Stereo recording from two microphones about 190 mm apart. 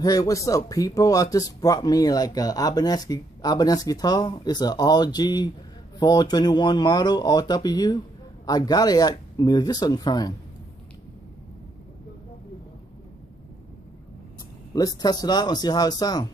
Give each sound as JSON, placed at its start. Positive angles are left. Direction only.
{"t": 0.0, "sound": "speech", "side_deg": 20}
{"t": 14.7, "sound": "speech", "side_deg": 20}